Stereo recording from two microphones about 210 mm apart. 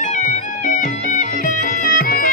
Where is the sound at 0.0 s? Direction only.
35° left (ahead or behind).